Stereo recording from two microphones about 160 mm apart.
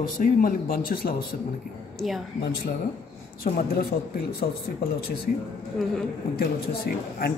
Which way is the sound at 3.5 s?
70° left (ahead or behind).